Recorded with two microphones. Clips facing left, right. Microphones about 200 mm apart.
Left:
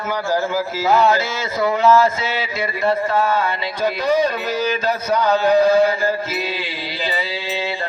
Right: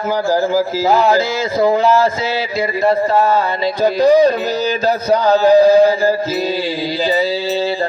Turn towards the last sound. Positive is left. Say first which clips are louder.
# right 5 dB
turn(degrees=-35)  # may be behind; listen again after turning